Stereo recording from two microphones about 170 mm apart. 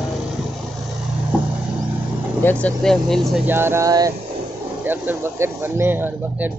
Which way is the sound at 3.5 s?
15° right (ahead or behind).